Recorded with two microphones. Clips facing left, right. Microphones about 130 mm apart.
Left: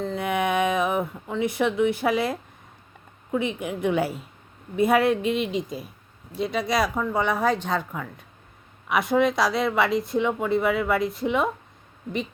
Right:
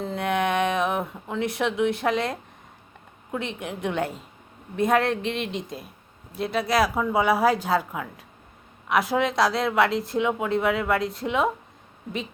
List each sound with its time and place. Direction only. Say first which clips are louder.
0.0 s speech: even; centre (ahead or behind)